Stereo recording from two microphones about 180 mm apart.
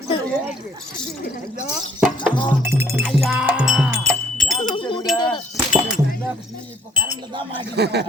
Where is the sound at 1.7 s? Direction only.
5° right (ahead or behind).